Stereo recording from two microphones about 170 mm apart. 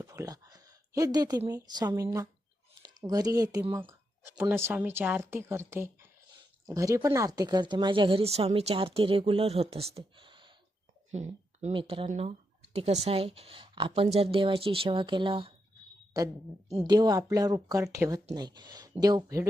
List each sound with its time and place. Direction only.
0.0 s speech: 20° right (ahead or behind)
11.1 s speech: 40° right (ahead or behind)
16.1 s speech: 20° right (ahead or behind)